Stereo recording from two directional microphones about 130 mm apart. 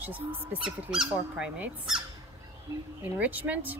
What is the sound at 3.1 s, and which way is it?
Speech, 10° right (ahead or behind).